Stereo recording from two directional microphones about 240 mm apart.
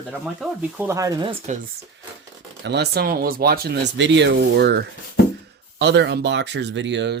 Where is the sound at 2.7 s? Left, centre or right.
Right.